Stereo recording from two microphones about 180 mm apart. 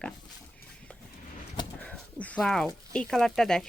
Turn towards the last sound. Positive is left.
turn(degrees=5)  # may be behind; listen again after turning